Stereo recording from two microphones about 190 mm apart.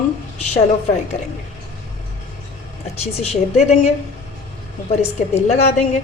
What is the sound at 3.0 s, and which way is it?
Speech, 35° left (ahead or behind).